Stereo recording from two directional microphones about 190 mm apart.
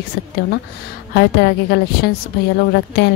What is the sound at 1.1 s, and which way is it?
Speech, 60° left (ahead or behind).